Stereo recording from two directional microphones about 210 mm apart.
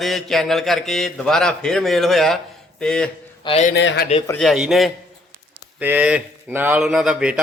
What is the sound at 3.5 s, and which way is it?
Speech, 30° left (ahead or behind).